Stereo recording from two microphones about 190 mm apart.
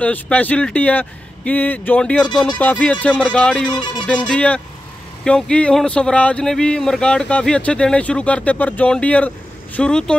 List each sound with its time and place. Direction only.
0.0 s speech: 5° left (ahead or behind)